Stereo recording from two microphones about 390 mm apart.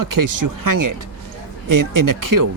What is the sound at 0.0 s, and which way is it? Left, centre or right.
Speech, right.